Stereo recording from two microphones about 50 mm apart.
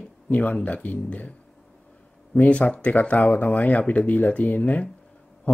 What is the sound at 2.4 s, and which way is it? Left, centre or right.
Speech, left.